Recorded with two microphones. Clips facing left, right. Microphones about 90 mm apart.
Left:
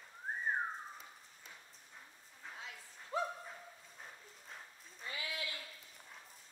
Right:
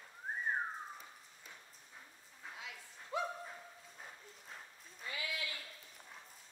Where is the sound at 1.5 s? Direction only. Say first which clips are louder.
Even; centre (ahead or behind).